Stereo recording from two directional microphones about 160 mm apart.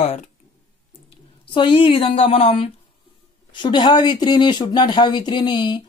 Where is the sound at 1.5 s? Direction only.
30° left (ahead or behind).